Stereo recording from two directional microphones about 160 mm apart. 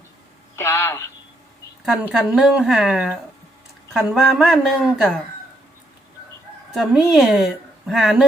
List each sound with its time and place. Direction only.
0.5 s speech: 15° left (ahead or behind)
1.8 s speech: 5° right (ahead or behind)
6.7 s speech: 5° right (ahead or behind)